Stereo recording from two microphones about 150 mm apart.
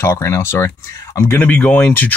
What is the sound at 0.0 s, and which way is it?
Speech, 20° left (ahead or behind).